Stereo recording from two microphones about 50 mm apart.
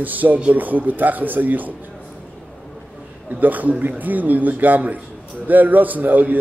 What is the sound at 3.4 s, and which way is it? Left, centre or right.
A man's voice, right.